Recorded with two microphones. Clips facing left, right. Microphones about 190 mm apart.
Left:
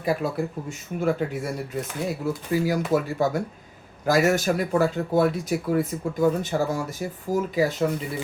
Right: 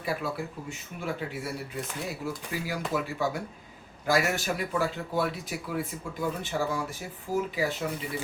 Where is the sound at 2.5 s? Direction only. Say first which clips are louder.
Left 11 dB; 45° left (ahead or behind).